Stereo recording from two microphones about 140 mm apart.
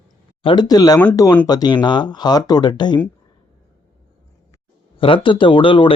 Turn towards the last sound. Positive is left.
turn(degrees=40)  # may be behind; listen again after turning